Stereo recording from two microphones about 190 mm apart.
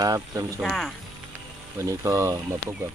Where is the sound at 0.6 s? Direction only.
Centre (ahead or behind).